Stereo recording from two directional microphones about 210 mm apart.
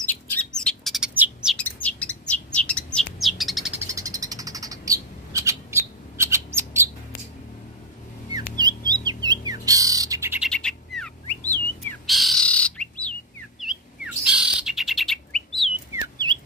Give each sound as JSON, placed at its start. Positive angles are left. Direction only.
{"t": 0.0, "sound": "bird", "side_deg": 5}
{"t": 1.6, "sound": "bird", "side_deg": 5}
{"t": 3.9, "sound": "bird", "side_deg": -15}
{"t": 8.5, "sound": "bird", "side_deg": -20}
{"t": 10.5, "sound": "bird", "side_deg": 5}
{"t": 15.9, "sound": "chirp", "side_deg": -10}